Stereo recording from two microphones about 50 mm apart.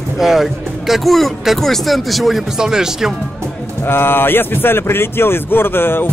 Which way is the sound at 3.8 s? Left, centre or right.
Left.